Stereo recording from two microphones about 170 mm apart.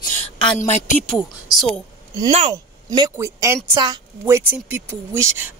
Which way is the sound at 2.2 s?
35° right (ahead or behind).